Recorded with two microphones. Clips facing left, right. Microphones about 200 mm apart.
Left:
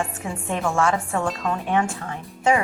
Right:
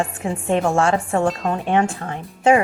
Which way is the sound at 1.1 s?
45° right (ahead or behind).